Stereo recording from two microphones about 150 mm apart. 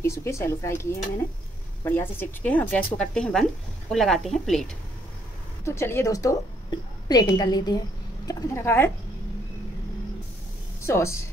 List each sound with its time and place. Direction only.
0.0 s speech: 20° left (ahead or behind)
1.9 s speech: 15° left (ahead or behind)
5.7 s a woman's voice: 15° left (ahead or behind)
10.8 s a woman's voice: 20° left (ahead or behind)